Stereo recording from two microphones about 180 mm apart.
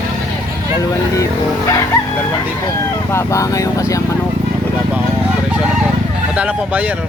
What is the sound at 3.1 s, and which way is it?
Speech, 15° left (ahead or behind).